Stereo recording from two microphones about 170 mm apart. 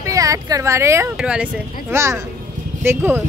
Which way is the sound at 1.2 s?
5° right (ahead or behind).